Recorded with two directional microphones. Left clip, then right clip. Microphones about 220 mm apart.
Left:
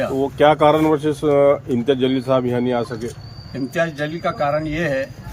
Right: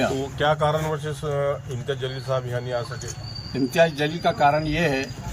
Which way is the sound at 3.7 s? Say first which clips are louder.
Right 1 dB; 5° left (ahead or behind).